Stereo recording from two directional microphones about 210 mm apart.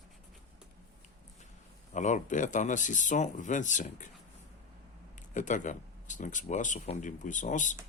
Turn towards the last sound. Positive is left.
turn(degrees=35)  # may be behind; listen again after turning